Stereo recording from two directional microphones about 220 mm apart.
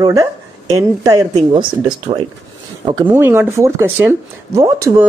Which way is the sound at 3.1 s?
10° right (ahead or behind).